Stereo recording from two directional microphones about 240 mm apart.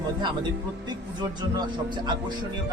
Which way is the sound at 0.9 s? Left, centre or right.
Centre.